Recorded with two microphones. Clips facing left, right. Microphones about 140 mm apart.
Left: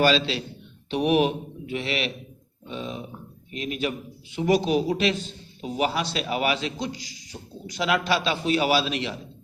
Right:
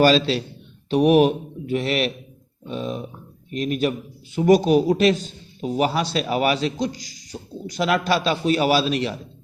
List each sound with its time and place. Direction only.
0.0 s a man's voice: 40° right (ahead or behind)